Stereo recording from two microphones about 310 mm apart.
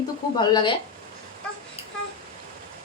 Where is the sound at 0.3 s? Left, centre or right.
Centre.